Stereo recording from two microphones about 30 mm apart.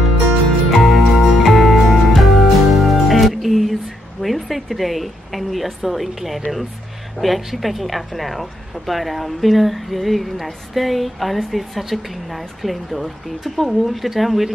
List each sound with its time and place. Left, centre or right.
0.7 s music: centre
4.2 s a woman's voice: centre